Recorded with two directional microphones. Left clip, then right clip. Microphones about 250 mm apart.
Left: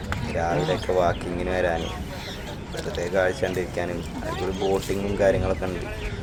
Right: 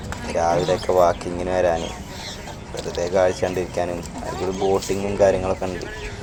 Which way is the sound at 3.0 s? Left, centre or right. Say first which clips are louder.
Right 4 dB; centre.